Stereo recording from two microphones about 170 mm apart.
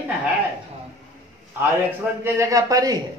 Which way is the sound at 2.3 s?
20° right (ahead or behind).